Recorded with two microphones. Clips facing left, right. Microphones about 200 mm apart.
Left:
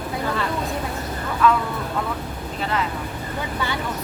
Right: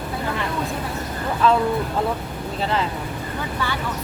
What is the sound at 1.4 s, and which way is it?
Speech, 30° right (ahead or behind).